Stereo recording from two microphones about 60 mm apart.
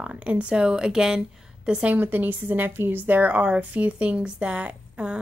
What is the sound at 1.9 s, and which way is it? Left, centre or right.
Speech, right.